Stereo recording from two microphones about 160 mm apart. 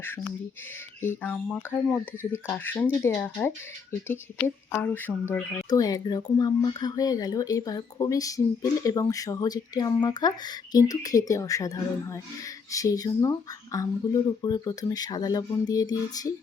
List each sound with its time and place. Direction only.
1.0 s speech: 10° left (ahead or behind)
5.6 s speech: 25° left (ahead or behind)